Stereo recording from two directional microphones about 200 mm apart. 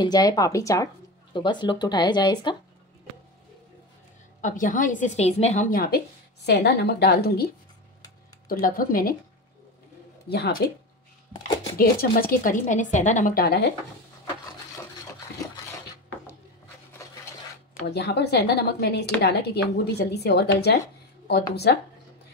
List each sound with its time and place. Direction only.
0.0 s speech: 20° left (ahead or behind)
4.4 s a woman's voice: 40° left (ahead or behind)
8.5 s a woman's voice: 45° left (ahead or behind)
10.3 s a woman's voice: 55° left (ahead or behind)
11.8 s a woman's voice: 45° left (ahead or behind)
17.8 s a woman's voice: 55° left (ahead or behind)